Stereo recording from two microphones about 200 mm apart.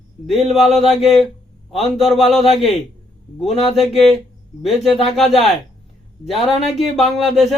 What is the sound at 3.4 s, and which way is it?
Speech, 30° left (ahead or behind).